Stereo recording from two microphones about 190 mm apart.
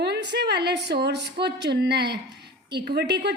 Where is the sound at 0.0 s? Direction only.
65° right (ahead or behind).